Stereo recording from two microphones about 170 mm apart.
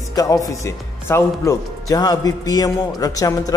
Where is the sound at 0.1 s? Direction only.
20° left (ahead or behind).